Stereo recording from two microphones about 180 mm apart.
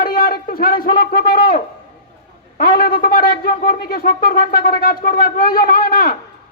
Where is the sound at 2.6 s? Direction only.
55° left (ahead or behind).